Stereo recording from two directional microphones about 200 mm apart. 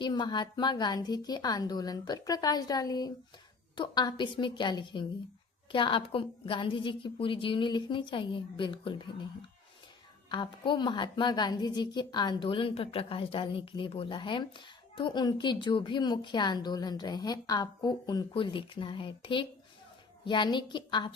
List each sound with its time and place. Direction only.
0.0 s a woman's voice: 20° left (ahead or behind)
10.2 s a woman's voice: 25° left (ahead or behind)